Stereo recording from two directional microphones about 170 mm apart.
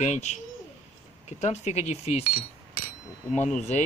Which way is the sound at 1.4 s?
40° left (ahead or behind).